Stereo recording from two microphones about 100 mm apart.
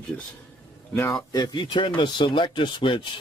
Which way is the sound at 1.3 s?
45° left (ahead or behind).